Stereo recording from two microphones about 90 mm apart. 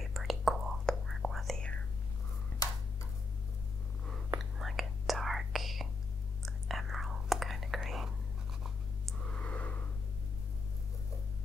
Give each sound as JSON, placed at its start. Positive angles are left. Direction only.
{"t": 0.0, "sound": "whispering", "side_deg": 0}
{"t": 4.4, "sound": "whispering", "side_deg": 0}
{"t": 9.2, "sound": "a sound", "side_deg": 10}